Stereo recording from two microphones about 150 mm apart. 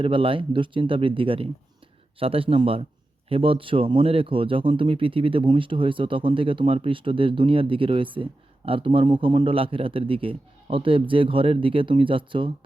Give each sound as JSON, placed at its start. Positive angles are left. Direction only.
{"t": 0.0, "sound": "speech", "side_deg": -35}